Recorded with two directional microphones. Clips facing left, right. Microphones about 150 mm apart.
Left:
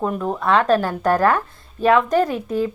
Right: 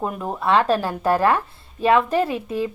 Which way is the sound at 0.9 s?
30° right (ahead or behind).